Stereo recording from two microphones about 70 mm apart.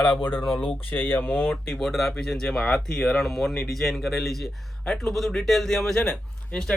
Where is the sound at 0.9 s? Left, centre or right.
Left.